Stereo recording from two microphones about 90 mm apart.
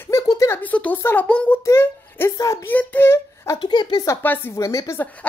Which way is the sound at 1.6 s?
30° left (ahead or behind).